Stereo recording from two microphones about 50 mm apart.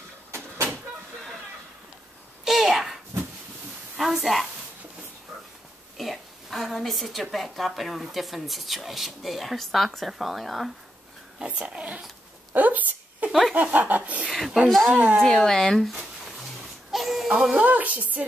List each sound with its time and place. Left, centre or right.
2.4 s a sound: centre
4.0 s a woman's voice: centre
5.9 s a woman's voice: centre
11.4 s speech: right
12.5 s a sound: right
13.3 s snicker: centre
13.6 s speech: right
14.3 s a woman's voice: centre
14.9 s speech: right
15.2 s speech: centre
16.3 s a sound: centre
17.3 s speech: centre
17.6 s speech: right